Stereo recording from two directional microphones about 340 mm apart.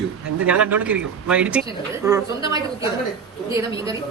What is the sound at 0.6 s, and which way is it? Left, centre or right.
A woman's voice, centre.